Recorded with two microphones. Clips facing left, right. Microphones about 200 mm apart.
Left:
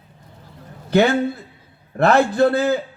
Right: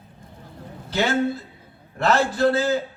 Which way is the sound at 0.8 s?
60° left (ahead or behind).